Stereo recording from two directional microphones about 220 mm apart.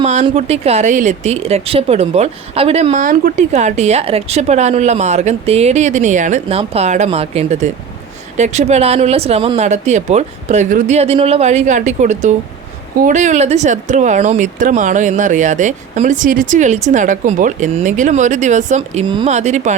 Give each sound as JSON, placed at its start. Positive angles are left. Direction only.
{"t": 0.0, "sound": "speech", "side_deg": -30}